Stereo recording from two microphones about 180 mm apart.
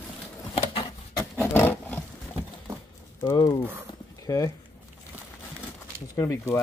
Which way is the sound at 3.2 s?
20° left (ahead or behind).